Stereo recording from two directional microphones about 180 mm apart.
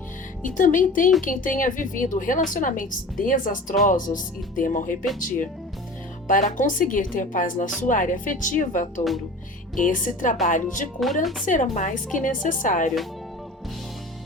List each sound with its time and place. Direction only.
0.4 s speech: 45° left (ahead or behind)
6.2 s speech: 45° left (ahead or behind)
11.0 s speech: centre (ahead or behind)
11.4 s speech: 45° left (ahead or behind)